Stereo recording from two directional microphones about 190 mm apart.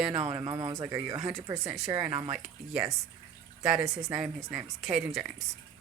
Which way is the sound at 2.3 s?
5° right (ahead or behind).